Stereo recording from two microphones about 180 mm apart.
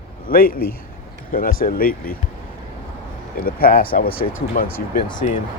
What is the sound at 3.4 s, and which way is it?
Speech, 55° left (ahead or behind).